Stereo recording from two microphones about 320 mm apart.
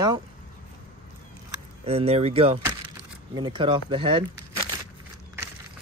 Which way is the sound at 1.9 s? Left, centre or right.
Centre.